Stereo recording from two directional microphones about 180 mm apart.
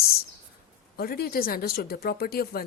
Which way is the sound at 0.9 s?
60° left (ahead or behind).